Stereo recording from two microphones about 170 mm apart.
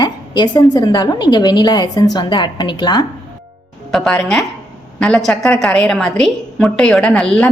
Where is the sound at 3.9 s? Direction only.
Centre (ahead or behind).